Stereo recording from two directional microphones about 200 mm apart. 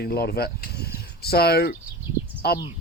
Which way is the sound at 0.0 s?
50° left (ahead or behind).